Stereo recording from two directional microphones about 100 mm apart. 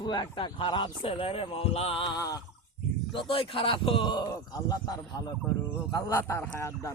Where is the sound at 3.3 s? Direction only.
65° left (ahead or behind); by 4.2 s 50° left (ahead or behind).